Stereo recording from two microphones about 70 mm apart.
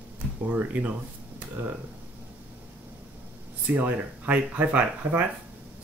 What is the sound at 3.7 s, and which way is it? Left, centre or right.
Speech, right.